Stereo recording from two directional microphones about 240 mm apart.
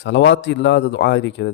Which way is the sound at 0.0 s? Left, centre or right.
Left.